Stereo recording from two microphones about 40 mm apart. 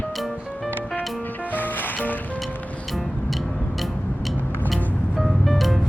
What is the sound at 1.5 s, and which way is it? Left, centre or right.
Music, left.